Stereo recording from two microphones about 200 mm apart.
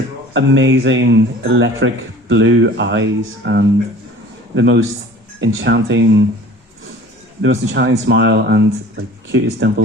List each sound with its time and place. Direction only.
0.3 s speech: 65° right (ahead or behind)
7.4 s speech: 60° right (ahead or behind)